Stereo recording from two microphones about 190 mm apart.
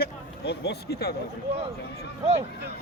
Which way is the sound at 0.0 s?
60° left (ahead or behind).